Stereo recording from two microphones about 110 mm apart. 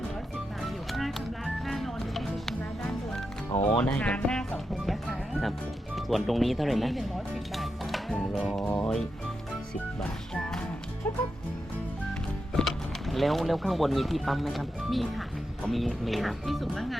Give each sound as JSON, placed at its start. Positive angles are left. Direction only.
{"t": 0.6, "sound": "music", "side_deg": 0}
{"t": 3.6, "sound": "speech", "side_deg": 10}
{"t": 5.3, "sound": "music", "side_deg": 0}
{"t": 6.0, "sound": "speech", "side_deg": 0}
{"t": 8.6, "sound": "music", "side_deg": 25}
{"t": 10.0, "sound": "music", "side_deg": 10}
{"t": 11.1, "sound": "music", "side_deg": 20}
{"t": 12.5, "sound": "speech", "side_deg": 0}